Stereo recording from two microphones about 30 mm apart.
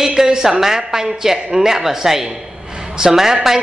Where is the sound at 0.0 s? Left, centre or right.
Centre.